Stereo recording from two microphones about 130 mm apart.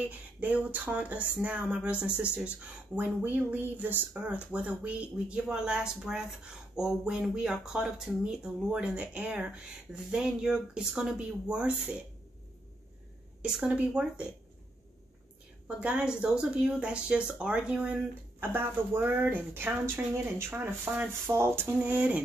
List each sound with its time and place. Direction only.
0.1 s speech: 10° right (ahead or behind)
13.4 s speech: 10° right (ahead or behind)
15.8 s speech: 10° right (ahead or behind)